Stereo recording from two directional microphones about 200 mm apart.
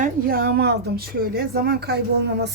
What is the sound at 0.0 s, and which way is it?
A woman's voice, 45° right (ahead or behind).